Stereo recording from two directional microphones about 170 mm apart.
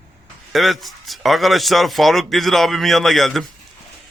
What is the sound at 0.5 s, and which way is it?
A man's voice, centre (ahead or behind).